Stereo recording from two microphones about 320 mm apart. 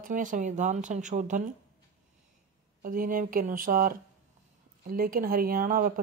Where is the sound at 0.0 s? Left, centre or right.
Right.